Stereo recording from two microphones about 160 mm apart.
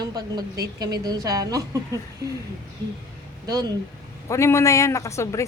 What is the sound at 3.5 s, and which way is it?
Speech, 25° right (ahead or behind).